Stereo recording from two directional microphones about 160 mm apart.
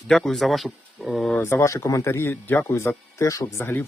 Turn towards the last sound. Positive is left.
turn(degrees=15)  # may be behind; listen again after turning